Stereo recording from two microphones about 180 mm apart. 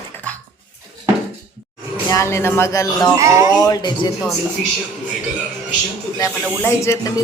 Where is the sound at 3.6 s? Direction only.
20° left (ahead or behind).